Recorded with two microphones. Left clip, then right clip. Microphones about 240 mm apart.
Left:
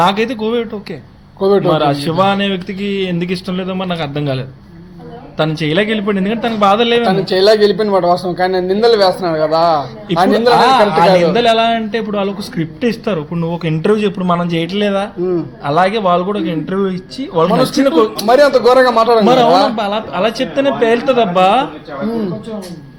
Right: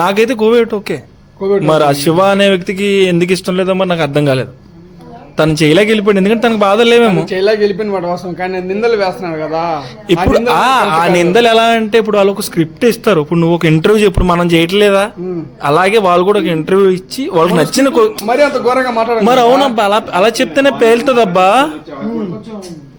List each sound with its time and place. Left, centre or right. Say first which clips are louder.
0.0 s a man's voice: right 3 dB; right
1.4 s a man's voice: left 1 dB; left
1.7 s a man's voice: right 4 dB; right
7.3 s speech: left 2 dB; centre
10.3 s a man's voice: left 1 dB; right
18.3 s speech: left 2 dB; centre
19.2 s a man's voice: right 1 dB; right